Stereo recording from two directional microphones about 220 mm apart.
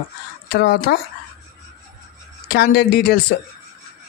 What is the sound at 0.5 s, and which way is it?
Speech, 45° left (ahead or behind).